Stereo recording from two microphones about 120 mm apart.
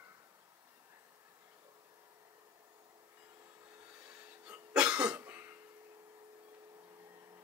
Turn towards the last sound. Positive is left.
turn(degrees=-20)  # may be behind; listen again after turning